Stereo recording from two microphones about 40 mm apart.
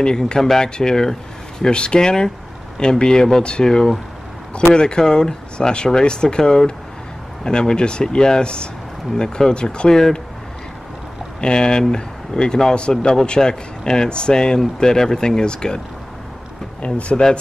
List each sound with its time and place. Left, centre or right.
0.4 s speech: centre
9.8 s speech: centre
11.4 s speech: left
16.8 s speech: left